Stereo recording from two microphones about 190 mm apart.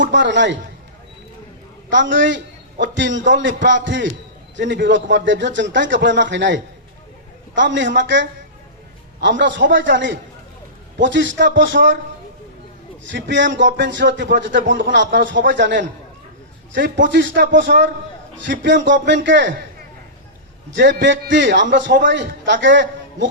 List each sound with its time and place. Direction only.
0.1 s speech: 70° right (ahead or behind)
1.9 s a man's voice: 75° right (ahead or behind)
13.1 s speech: 70° right (ahead or behind)
17.1 s speech: 70° right (ahead or behind)
20.7 s speech: 70° right (ahead or behind)